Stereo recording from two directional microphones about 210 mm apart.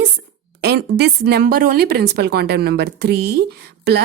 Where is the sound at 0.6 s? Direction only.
50° right (ahead or behind).